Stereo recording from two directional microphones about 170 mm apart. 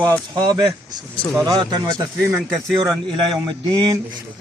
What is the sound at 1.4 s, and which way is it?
Speech, 25° right (ahead or behind).